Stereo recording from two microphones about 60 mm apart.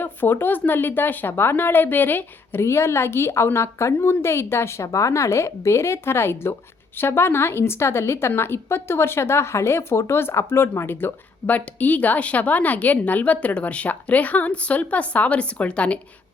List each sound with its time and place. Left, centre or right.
0.0 s a woman's voice: left